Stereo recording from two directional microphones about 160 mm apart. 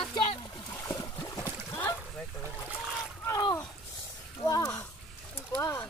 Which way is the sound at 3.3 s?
20° left (ahead or behind).